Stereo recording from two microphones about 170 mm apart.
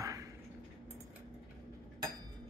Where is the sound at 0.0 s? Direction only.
20° right (ahead or behind).